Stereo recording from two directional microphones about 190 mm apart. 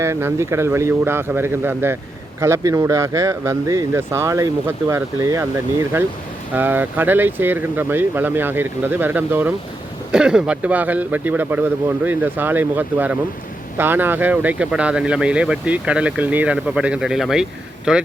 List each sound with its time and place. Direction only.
0.0 s speech: 15° right (ahead or behind)
6.5 s speech: 10° right (ahead or behind)